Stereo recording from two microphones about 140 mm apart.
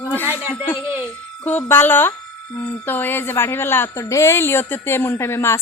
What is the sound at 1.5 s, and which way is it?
A woman's voice, 15° left (ahead or behind).